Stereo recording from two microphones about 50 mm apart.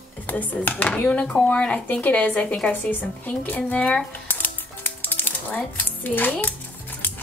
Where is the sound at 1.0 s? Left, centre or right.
Centre.